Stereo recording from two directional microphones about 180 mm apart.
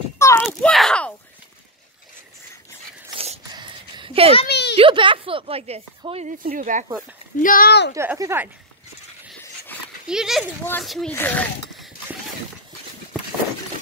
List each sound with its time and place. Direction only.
0.4 s a sound: 5° left (ahead or behind)
3.5 s a sound: 25° right (ahead or behind)
4.5 s a sound: 70° left (ahead or behind)
4.7 s speech: 30° right (ahead or behind)
6.3 s speech: 50° right (ahead or behind)
7.3 s speech: 50° left (ahead or behind)
7.9 s speech: 15° right (ahead or behind)
10.0 s speech: 5° right (ahead or behind)
10.6 s speech: 10° left (ahead or behind)